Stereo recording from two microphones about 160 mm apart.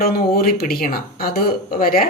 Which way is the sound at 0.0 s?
70° left (ahead or behind).